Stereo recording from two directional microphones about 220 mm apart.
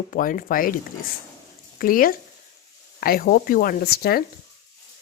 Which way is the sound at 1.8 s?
40° left (ahead or behind).